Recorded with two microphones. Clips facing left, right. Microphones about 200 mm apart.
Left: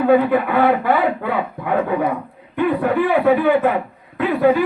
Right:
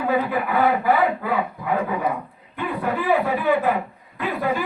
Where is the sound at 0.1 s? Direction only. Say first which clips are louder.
Left 7 dB; 65° left (ahead or behind).